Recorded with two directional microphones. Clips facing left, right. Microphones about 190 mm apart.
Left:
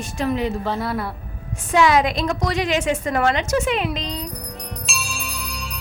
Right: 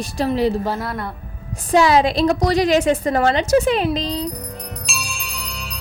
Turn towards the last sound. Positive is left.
turn(degrees=0)  # may be behind; listen again after turning